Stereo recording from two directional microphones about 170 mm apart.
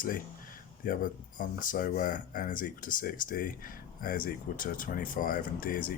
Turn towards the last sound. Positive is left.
turn(degrees=55)  # may be behind; listen again after turning